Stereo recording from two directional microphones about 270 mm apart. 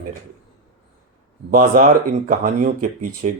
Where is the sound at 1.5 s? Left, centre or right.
Right.